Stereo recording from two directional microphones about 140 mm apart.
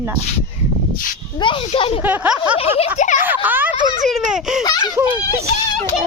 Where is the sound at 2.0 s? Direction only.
10° right (ahead or behind).